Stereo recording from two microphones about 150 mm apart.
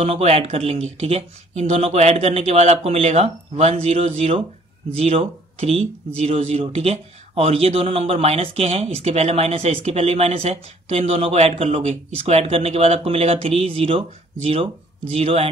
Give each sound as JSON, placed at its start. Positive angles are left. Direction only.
{"t": 0.0, "sound": "speech", "side_deg": -40}